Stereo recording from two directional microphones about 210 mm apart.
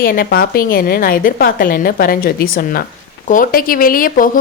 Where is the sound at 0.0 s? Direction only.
45° left (ahead or behind).